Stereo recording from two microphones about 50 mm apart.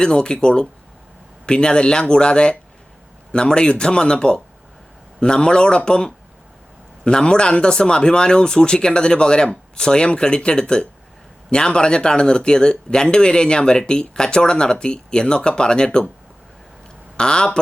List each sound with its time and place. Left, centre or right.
0.0 s speech: centre
17.2 s speech: centre